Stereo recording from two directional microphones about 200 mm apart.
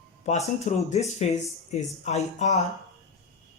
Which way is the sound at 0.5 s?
35° left (ahead or behind).